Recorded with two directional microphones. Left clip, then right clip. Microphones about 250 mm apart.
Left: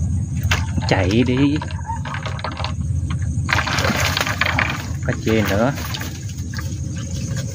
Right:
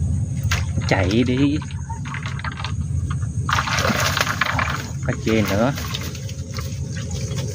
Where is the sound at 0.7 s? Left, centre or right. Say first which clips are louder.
Even; centre.